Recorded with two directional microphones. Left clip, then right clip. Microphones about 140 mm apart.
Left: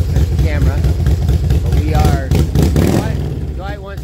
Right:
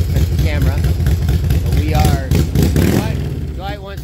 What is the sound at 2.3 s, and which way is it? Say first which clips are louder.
Vehicle: left 1 dB; 20° left (ahead or behind).